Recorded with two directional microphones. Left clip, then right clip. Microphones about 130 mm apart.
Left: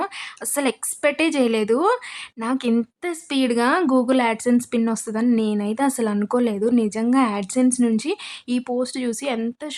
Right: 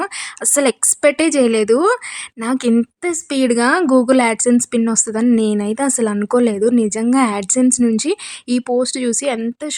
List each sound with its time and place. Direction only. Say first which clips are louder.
0.5 s a woman's voice: right 8 dB; 45° right (ahead or behind)
2.4 s a woman's voice: right 5 dB; 45° right (ahead or behind)
3.0 s a woman's voice: right 5 dB; 35° right (ahead or behind)